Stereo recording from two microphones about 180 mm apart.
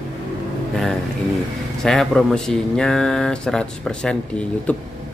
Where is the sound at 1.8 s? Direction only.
5° left (ahead or behind).